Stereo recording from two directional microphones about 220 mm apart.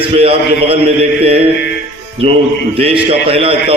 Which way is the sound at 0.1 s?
25° right (ahead or behind).